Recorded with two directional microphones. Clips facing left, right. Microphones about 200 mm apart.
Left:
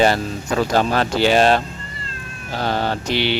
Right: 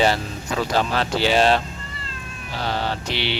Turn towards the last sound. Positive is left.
turn(degrees=45)  # may be behind; listen again after turning